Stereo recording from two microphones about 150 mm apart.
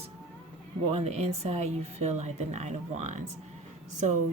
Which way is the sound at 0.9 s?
45° right (ahead or behind).